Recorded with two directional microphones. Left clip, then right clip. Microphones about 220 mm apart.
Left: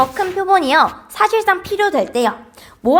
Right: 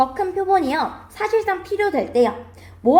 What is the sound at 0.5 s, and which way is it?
A woman's voice, 25° left (ahead or behind).